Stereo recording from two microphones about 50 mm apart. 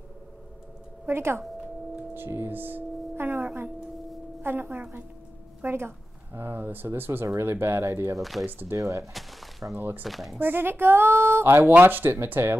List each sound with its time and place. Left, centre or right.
1.0 s speech: right
2.1 s singing bowl: right
4.4 s a woman's voice: right
8.2 s speech: centre
8.6 s speech: right
9.1 s a sound: centre
9.8 s speech: right
10.0 s speech: centre
10.4 s speech: right